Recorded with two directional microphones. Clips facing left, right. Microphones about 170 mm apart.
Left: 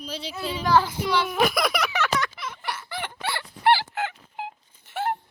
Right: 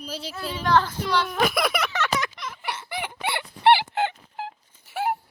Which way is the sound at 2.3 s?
Centre (ahead or behind).